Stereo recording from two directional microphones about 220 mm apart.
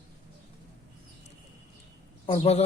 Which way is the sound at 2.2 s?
25° left (ahead or behind).